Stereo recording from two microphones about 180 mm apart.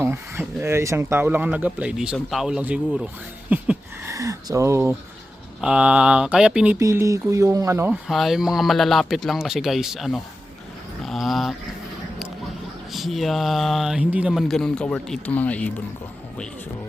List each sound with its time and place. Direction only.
0.0 s speech: 15° right (ahead or behind)
5.5 s speech: 5° right (ahead or behind)
6.7 s speech: 15° right (ahead or behind)
8.0 s speech: centre (ahead or behind)
11.0 s a sound: centre (ahead or behind)
12.9 s speech: centre (ahead or behind)